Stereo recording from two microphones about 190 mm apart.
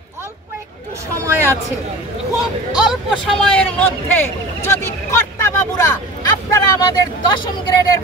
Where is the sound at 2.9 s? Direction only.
Centre (ahead or behind).